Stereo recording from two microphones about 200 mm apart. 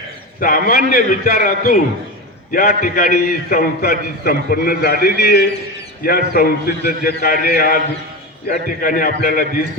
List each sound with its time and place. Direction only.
0.3 s a man's voice: 45° left (ahead or behind)